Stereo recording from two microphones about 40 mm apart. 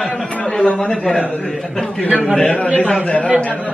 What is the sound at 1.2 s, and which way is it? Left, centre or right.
Speech, left.